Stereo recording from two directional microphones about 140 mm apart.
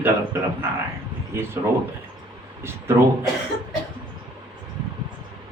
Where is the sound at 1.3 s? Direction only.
20° right (ahead or behind).